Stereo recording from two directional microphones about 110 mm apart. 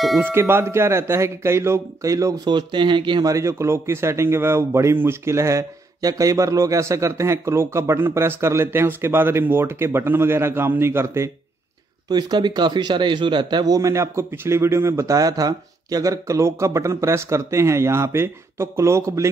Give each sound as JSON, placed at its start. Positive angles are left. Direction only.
{"t": 0.2, "sound": "a man's voice", "side_deg": -20}
{"t": 2.4, "sound": "speech", "side_deg": -45}
{"t": 3.3, "sound": "a man's voice", "side_deg": -30}
{"t": 12.1, "sound": "a man's voice", "side_deg": -40}